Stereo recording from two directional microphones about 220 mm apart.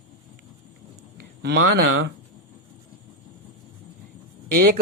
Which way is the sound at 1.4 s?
50° right (ahead or behind).